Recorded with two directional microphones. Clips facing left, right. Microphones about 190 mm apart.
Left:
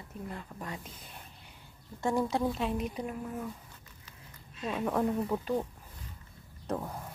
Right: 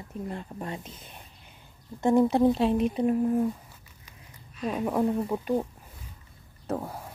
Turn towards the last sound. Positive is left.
turn(degrees=-10)  # may be behind; listen again after turning